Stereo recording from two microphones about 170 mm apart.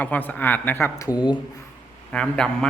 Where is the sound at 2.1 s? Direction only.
5° left (ahead or behind).